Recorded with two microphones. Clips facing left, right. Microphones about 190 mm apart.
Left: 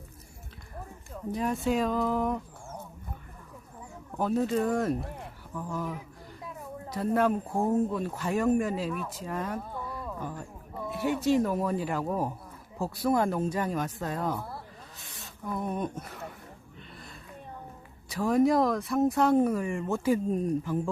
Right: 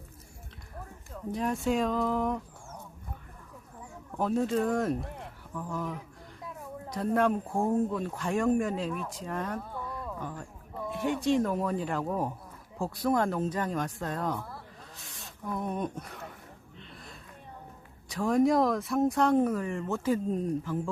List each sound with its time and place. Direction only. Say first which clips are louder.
1.3 s speech: left 1 dB; centre (ahead or behind)
4.1 s speech: left 1 dB; centre (ahead or behind)
18.1 s speech: left 1 dB; 5° left (ahead or behind)